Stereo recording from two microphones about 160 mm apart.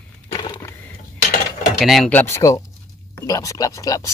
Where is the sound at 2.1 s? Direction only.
15° left (ahead or behind).